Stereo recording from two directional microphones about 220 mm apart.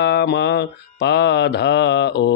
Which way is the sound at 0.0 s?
50° left (ahead or behind).